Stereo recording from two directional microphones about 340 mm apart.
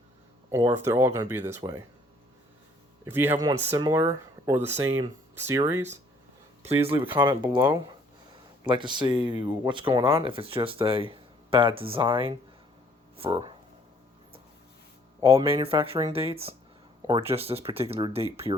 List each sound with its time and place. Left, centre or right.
0.5 s speech: centre
3.0 s speech: centre
15.2 s speech: centre